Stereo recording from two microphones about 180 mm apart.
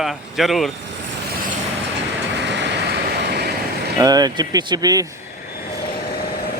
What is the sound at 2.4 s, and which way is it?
Vehicle, 75° right (ahead or behind).